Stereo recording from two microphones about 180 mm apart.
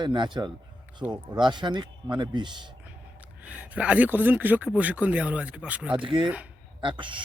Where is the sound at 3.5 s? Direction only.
10° right (ahead or behind).